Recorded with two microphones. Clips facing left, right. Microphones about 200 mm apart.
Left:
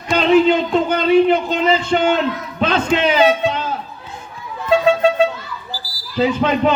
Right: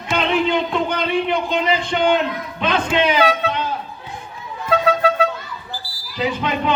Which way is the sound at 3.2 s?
25° left (ahead or behind).